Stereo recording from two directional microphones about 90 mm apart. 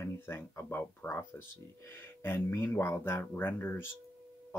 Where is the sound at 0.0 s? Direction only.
25° left (ahead or behind).